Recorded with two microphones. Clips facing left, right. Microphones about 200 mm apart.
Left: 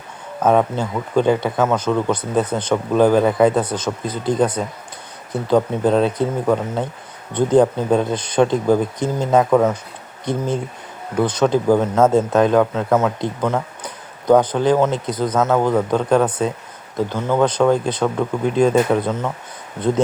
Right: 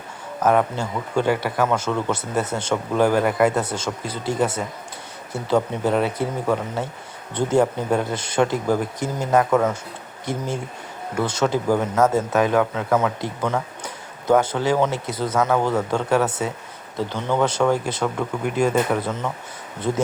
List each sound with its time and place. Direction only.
0.4 s speech: 20° left (ahead or behind)
9.4 s speech: 10° left (ahead or behind)